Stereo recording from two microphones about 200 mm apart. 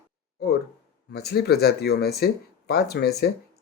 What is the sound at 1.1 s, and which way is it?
Speech, 55° left (ahead or behind).